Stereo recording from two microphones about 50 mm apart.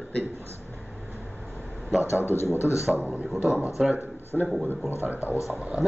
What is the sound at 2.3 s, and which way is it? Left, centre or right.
Speech, left.